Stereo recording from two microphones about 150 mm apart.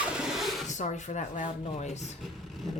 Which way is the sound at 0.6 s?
55° left (ahead or behind).